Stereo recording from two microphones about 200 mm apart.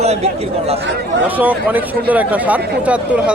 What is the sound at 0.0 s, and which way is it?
Speech, 30° right (ahead or behind).